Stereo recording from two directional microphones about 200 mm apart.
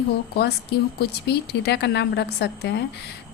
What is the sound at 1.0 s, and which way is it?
A woman's voice, 55° left (ahead or behind).